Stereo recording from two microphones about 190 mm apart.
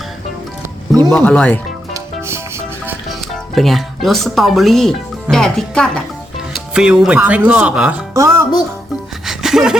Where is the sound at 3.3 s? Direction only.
Centre (ahead or behind).